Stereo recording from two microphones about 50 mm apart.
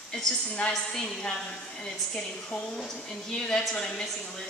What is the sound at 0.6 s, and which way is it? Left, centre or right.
Speech, left.